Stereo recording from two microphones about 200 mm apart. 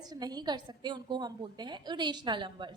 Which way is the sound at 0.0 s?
20° right (ahead or behind).